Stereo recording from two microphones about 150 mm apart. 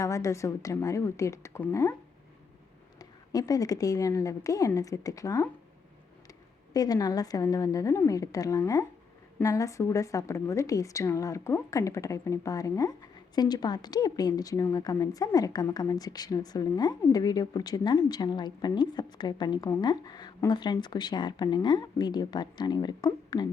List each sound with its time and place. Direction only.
0.0 s a woman's voice: 20° left (ahead or behind)
3.0 s a woman's voice: 25° left (ahead or behind)
6.7 s a woman's voice: 25° left (ahead or behind)